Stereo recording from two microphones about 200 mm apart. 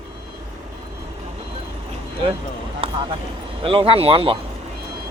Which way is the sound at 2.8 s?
25° right (ahead or behind).